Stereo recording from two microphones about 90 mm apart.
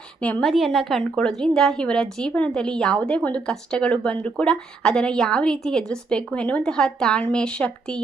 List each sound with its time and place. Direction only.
0.2 s speech: 15° left (ahead or behind)
0.4 s a woman's voice: centre (ahead or behind)